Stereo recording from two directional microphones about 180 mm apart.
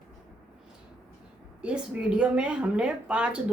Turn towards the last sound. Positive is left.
turn(degrees=-5)  # may be behind; listen again after turning